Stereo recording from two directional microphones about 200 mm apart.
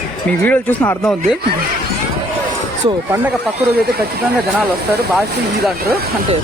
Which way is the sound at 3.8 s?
50° right (ahead or behind).